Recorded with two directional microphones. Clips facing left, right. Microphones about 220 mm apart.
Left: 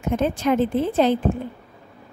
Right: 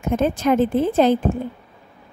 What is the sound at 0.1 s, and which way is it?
A woman's voice, 45° right (ahead or behind).